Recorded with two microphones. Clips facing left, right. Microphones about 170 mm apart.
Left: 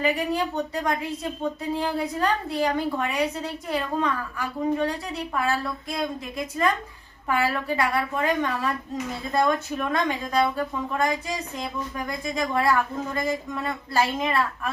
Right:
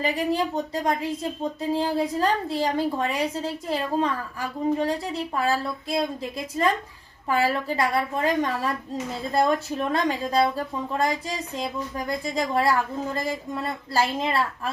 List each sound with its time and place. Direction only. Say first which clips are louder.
0.0 s speech: even; 30° right (ahead or behind)